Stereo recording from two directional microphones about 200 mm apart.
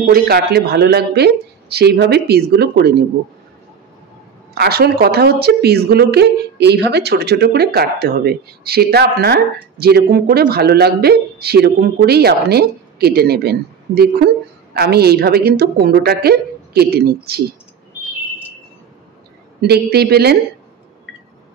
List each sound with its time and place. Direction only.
0.1 s a woman's voice: 50° right (ahead or behind)
4.6 s a woman's voice: 50° right (ahead or behind)
19.6 s a woman's voice: 55° right (ahead or behind)